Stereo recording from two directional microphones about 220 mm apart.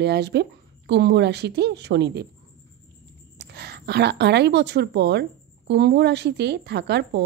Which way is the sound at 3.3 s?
50° right (ahead or behind).